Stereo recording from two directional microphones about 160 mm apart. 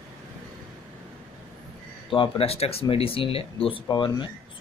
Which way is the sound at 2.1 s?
35° left (ahead or behind).